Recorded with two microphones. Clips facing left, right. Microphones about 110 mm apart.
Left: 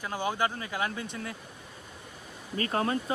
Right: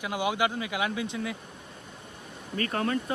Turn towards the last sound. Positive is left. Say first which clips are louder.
# even
turn(degrees=25)  # may be behind; listen again after turning